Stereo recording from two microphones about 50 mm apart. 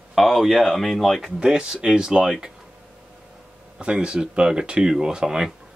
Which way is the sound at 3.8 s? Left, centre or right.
Centre.